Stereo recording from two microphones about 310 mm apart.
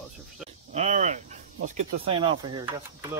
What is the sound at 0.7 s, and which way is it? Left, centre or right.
Speech, right.